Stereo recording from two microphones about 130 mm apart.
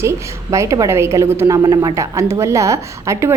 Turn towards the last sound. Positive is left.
turn(degrees=-25)  # may be behind; listen again after turning